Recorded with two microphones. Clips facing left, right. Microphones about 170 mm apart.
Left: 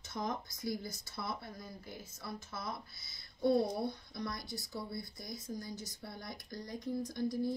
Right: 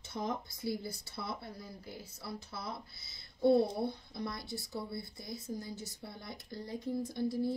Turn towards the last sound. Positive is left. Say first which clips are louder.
# right 1 dB
turn(degrees=-25)  # may be behind; listen again after turning